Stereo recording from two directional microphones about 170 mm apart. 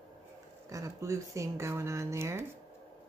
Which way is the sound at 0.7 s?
20° right (ahead or behind).